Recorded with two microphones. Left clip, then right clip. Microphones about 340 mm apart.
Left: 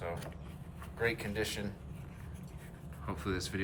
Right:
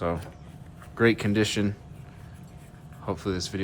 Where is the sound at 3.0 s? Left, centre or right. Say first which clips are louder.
Right 8 dB; centre.